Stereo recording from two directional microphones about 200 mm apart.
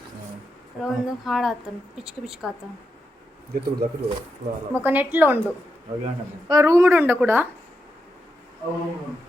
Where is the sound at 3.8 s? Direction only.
50° right (ahead or behind).